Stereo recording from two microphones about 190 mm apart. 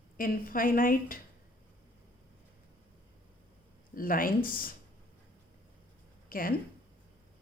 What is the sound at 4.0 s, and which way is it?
Speech, 50° left (ahead or behind).